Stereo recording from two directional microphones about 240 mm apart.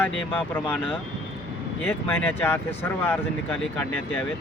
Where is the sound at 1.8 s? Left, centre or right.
Centre.